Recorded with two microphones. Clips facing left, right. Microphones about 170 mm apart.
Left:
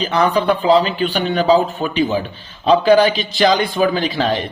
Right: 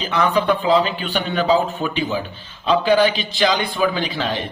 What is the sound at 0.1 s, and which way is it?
A man's voice, 35° left (ahead or behind).